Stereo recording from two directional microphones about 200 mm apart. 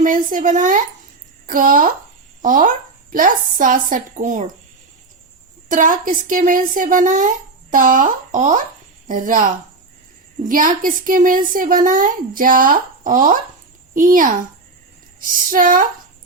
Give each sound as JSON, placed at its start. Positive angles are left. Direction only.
{"t": 0.0, "sound": "speech", "side_deg": -40}
{"t": 5.6, "sound": "speech", "side_deg": -40}
{"t": 10.5, "sound": "speech", "side_deg": -45}